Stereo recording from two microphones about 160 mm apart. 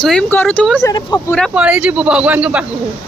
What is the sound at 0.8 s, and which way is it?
Speech, 20° left (ahead or behind).